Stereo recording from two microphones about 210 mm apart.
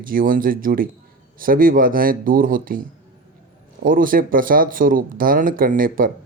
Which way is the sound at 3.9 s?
40° right (ahead or behind).